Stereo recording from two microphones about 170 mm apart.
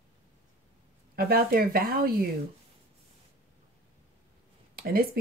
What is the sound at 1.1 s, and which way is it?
Speech, 60° right (ahead or behind).